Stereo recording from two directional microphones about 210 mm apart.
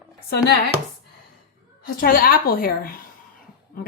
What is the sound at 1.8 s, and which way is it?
A woman's voice, 45° left (ahead or behind).